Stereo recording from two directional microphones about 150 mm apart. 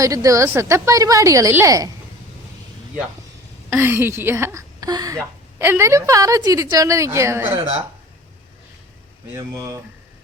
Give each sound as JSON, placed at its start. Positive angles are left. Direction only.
{"t": 0.0, "sound": "a woman's voice", "side_deg": -20}
{"t": 3.7, "sound": "a woman's voice", "side_deg": -15}
{"t": 9.3, "sound": "a woman's voice", "side_deg": -20}